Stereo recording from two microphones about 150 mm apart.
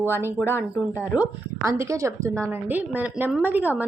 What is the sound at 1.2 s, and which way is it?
A woman's voice, 15° right (ahead or behind).